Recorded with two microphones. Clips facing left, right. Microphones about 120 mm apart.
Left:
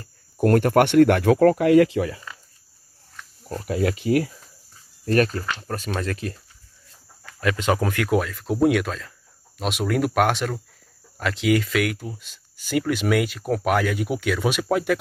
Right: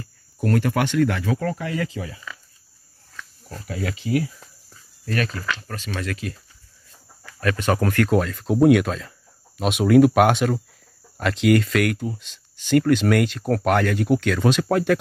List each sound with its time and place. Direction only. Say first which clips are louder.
0.4 s speech: left 5 dB; 50° left (ahead or behind); by 2.0 s 70° left (ahead or behind)
3.9 s speech: left 2 dB; 50° left (ahead or behind)
7.3 s speech: even; 15° left (ahead or behind)